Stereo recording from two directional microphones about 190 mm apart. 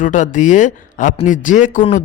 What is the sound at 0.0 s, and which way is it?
A man's voice, 40° left (ahead or behind).